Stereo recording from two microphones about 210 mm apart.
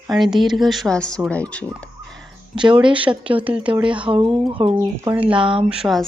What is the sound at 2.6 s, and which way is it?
Speech, 20° right (ahead or behind).